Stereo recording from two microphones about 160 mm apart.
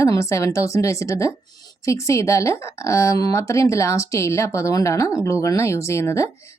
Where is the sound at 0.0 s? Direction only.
20° left (ahead or behind).